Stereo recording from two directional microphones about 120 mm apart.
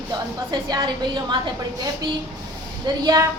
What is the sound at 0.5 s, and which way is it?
Speech, 40° right (ahead or behind).